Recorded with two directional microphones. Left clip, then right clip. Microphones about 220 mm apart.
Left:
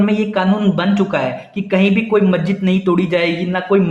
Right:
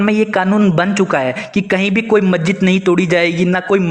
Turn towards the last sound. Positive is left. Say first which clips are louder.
# right 2 dB
turn(degrees=-40)  # may be behind; listen again after turning